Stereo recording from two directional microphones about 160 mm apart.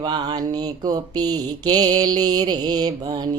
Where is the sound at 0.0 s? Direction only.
25° right (ahead or behind).